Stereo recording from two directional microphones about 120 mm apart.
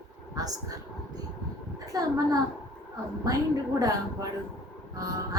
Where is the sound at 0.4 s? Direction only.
30° right (ahead or behind).